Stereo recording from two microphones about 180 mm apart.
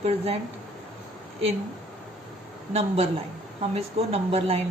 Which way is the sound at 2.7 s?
35° right (ahead or behind).